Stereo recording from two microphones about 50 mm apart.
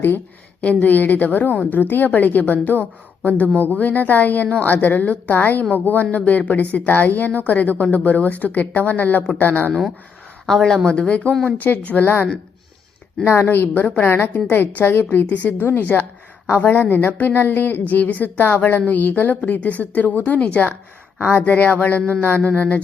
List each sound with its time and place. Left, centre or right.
0.6 s a woman's voice: left
4.4 s speech: left
4.7 s a woman's voice: left
10.4 s speech: centre
10.8 s a woman's voice: left
13.2 s a woman's voice: left
13.5 s a woman's voice: left